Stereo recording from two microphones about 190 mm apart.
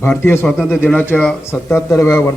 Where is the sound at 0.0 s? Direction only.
10° left (ahead or behind).